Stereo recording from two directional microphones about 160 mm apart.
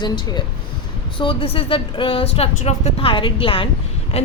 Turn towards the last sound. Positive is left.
turn(degrees=40)  # may be behind; listen again after turning